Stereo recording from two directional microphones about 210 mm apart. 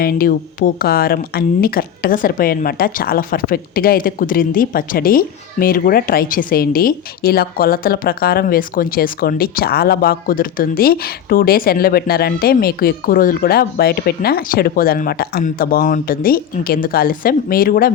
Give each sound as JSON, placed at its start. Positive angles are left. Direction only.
{"t": 0.0, "sound": "speech", "side_deg": 45}